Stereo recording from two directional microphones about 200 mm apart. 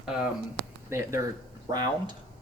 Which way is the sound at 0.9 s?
15° right (ahead or behind).